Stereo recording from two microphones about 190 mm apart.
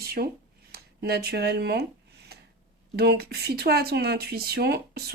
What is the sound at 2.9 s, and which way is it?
Speech, 55° right (ahead or behind).